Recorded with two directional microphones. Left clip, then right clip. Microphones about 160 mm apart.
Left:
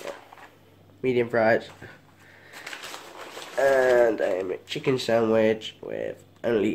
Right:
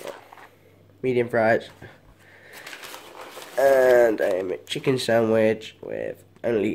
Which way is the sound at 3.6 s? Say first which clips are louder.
Right 3 dB; 20° right (ahead or behind).